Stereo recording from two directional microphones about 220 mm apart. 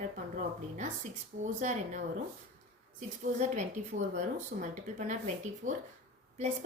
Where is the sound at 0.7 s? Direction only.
35° right (ahead or behind).